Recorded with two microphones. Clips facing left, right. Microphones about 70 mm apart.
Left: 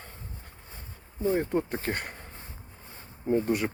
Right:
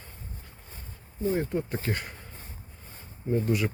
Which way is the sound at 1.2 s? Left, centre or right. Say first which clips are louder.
Left 2 dB; left.